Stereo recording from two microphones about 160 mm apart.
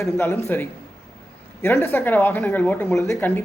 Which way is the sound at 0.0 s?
15° left (ahead or behind).